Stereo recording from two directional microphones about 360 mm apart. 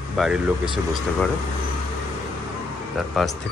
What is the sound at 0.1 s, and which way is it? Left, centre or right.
Speech, centre.